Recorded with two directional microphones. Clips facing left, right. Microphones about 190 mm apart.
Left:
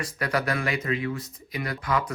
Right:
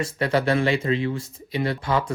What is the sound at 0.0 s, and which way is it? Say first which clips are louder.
Speech: right 5 dB; 25° right (ahead or behind).